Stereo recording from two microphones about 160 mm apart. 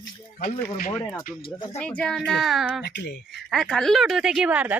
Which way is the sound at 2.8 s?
90° left.